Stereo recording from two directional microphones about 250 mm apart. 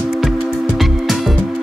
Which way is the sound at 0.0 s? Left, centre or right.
Centre.